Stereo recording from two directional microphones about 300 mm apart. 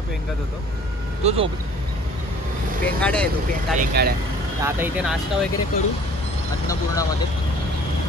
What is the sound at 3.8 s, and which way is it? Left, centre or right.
Speech, right.